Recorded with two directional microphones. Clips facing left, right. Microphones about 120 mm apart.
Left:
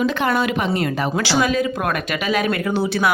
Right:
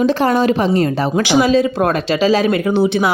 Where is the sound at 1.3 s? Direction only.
20° right (ahead or behind).